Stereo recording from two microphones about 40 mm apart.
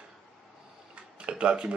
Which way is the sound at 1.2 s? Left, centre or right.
Right.